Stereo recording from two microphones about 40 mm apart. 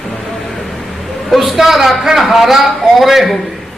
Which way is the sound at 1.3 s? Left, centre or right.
Centre.